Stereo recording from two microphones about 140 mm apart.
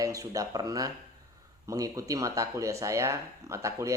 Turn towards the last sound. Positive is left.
turn(degrees=-20)  # may be behind; listen again after turning